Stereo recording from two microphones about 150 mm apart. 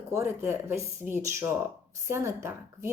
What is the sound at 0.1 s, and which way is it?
Speech, 15° right (ahead or behind).